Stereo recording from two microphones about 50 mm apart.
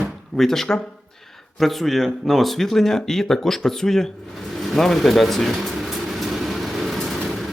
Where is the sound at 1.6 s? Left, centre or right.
Centre.